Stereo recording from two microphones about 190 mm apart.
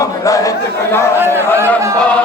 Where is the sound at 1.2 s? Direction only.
10° right (ahead or behind).